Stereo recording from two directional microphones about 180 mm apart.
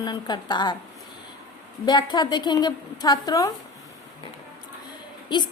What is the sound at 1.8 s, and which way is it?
A woman's voice, 25° left (ahead or behind).